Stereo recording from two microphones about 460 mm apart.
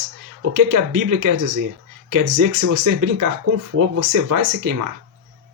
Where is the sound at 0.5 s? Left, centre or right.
Right.